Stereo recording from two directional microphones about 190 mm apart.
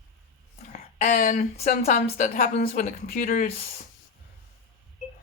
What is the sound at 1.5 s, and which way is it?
A woman's voice, 35° left (ahead or behind).